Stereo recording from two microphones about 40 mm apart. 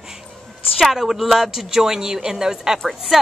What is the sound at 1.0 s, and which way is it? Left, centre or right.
A woman's voice, centre.